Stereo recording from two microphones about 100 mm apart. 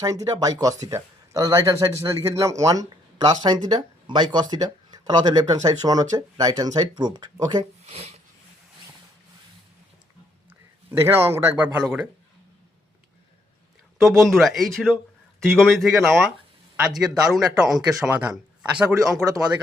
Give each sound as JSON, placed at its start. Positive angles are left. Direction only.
{"t": 0.0, "sound": "speech", "side_deg": -35}
{"t": 7.9, "sound": "a sound", "side_deg": -90}
{"t": 10.9, "sound": "speech", "side_deg": -25}
{"t": 14.0, "sound": "speech", "side_deg": 0}